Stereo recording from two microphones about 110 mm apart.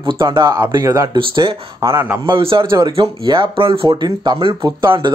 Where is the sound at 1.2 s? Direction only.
50° right (ahead or behind).